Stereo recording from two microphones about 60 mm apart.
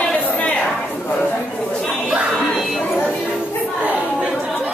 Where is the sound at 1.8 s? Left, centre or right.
Centre.